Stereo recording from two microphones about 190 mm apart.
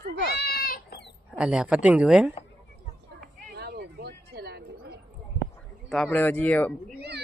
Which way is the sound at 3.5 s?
60° right (ahead or behind).